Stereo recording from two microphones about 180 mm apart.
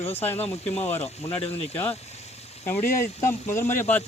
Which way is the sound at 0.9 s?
10° left (ahead or behind).